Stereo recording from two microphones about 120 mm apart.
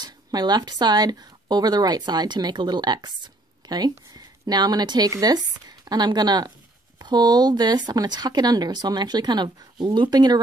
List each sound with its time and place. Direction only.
0.0 s speech: 35° right (ahead or behind)